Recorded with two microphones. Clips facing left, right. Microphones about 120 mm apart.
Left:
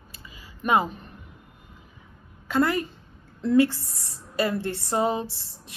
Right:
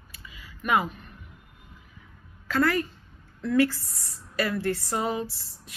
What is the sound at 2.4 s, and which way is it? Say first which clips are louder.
A woman's voice: left 1 dB; 20° left (ahead or behind).